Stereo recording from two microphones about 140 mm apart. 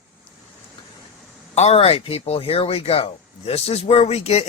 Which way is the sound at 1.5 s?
50° left (ahead or behind).